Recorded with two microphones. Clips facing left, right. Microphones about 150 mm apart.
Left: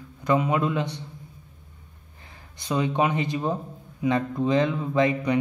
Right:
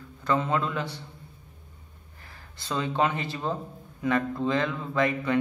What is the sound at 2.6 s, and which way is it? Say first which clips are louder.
A man's voice: left 3 dB; 15° left (ahead or behind).